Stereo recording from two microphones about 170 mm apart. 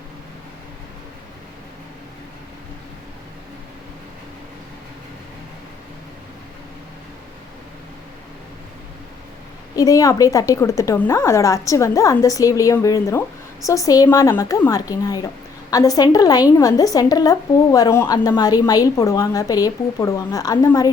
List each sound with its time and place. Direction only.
9.7 s a woman's voice: 20° left (ahead or behind)